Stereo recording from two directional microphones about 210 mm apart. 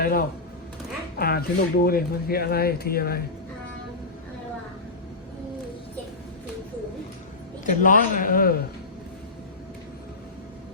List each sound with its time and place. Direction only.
0.0 s speech: 45° left (ahead or behind)
7.6 s a man's voice: 40° left (ahead or behind)